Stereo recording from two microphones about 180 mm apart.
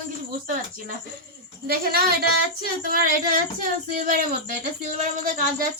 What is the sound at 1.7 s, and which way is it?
Speech, 55° right (ahead or behind).